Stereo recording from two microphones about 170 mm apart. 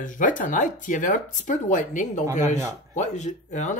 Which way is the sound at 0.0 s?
50° left (ahead or behind).